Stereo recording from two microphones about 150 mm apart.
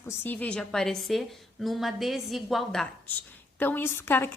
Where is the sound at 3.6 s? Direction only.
15° left (ahead or behind).